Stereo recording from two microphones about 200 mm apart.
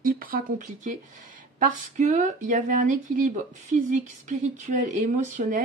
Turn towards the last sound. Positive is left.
turn(degrees=-40)  # may be behind; listen again after turning